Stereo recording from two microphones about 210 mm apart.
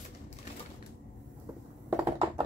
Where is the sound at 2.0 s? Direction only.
20° right (ahead or behind).